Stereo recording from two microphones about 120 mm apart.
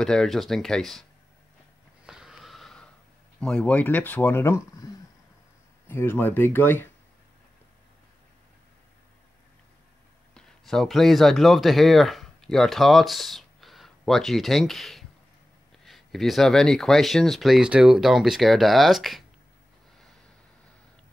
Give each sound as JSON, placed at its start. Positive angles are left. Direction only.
{"t": 0.0, "sound": "speech", "side_deg": 5}
{"t": 2.0, "sound": "snort", "side_deg": -5}
{"t": 3.3, "sound": "speech", "side_deg": 10}
{"t": 10.3, "sound": "speech", "side_deg": 0}